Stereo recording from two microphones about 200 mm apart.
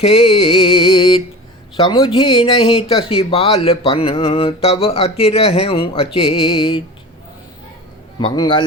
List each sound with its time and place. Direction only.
0.0 s music: 30° left (ahead or behind)
1.7 s speech: 25° left (ahead or behind)
8.2 s speech: 25° left (ahead or behind)